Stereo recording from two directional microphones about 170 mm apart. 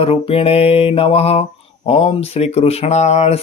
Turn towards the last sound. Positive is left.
turn(degrees=40)  # may be behind; listen again after turning